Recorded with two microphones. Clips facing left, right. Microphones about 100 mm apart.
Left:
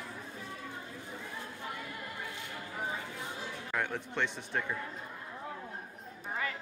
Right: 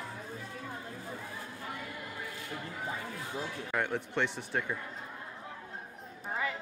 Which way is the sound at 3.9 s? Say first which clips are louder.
Right 2 dB; 15° right (ahead or behind).